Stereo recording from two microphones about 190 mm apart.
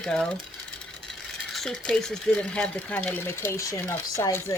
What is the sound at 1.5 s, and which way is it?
Speech, 5° left (ahead or behind).